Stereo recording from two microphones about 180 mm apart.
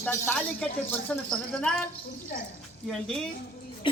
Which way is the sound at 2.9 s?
Centre (ahead or behind).